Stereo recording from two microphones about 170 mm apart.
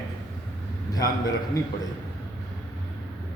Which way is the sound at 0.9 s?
20° left (ahead or behind).